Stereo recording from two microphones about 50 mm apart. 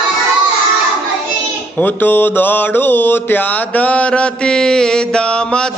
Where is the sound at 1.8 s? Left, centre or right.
Left.